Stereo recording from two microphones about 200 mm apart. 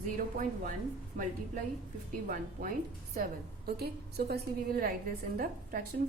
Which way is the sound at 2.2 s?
45° right (ahead or behind).